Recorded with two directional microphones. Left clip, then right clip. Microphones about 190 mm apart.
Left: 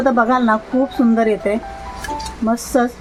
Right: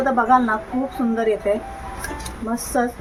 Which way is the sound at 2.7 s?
45° left (ahead or behind).